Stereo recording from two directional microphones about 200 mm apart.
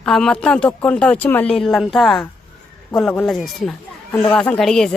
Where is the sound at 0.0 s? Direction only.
5° left (ahead or behind).